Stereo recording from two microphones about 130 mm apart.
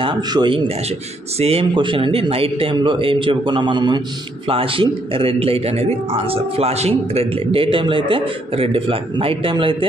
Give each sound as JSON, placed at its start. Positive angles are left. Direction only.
{"t": 0.0, "sound": "speech", "side_deg": -35}
{"t": 1.4, "sound": "a man's voice", "side_deg": -50}
{"t": 1.7, "sound": "a man's voice", "side_deg": -40}